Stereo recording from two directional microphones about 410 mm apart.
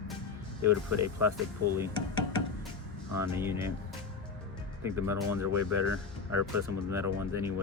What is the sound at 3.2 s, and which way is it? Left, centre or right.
Speech, centre.